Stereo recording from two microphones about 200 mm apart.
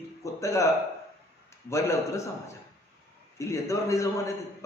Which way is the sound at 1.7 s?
15° left (ahead or behind).